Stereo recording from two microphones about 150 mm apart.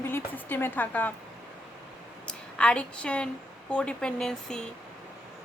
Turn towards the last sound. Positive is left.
turn(degrees=5)  # may be behind; listen again after turning